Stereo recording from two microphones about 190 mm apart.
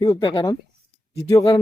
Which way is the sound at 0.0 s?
25° left (ahead or behind).